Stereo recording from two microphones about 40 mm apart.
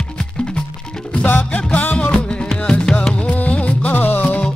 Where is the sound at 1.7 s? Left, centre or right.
Left.